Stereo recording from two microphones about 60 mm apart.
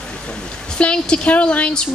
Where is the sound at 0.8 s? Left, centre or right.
Centre.